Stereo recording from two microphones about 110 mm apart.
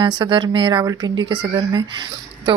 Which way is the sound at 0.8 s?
35° right (ahead or behind).